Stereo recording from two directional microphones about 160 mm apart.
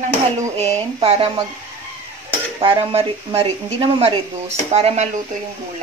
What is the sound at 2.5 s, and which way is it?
Speech, 35° right (ahead or behind).